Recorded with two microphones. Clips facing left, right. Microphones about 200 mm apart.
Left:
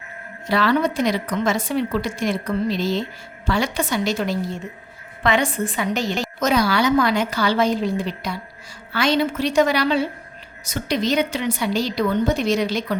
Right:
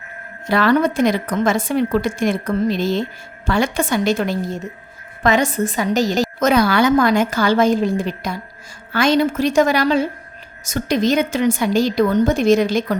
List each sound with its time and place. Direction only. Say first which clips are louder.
0.4 s a woman's voice: right 4 dB; 50° right (ahead or behind)
6.4 s a woman's voice: right 3 dB; 55° right (ahead or behind)